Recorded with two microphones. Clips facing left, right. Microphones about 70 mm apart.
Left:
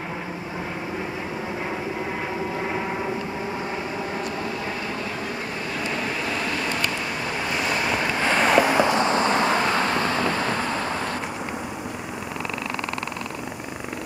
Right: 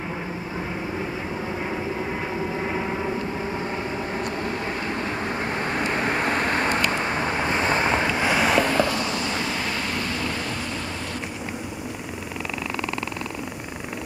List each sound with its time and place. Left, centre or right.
5.8 s vehicle: right
8.1 s vehicle: centre
8.6 s vehicle: centre
8.9 s vehicle: left